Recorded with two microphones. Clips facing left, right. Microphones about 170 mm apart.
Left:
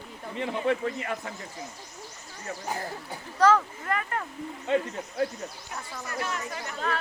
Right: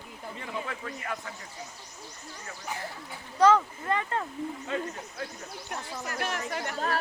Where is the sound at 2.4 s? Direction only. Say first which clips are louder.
Left 5 dB; 40° left (ahead or behind).